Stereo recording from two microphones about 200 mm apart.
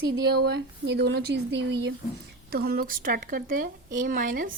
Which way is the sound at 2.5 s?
50° right (ahead or behind).